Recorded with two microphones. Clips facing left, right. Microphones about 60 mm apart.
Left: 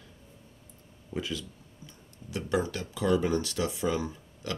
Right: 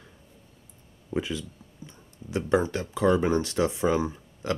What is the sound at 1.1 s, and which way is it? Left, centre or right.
Speech, right.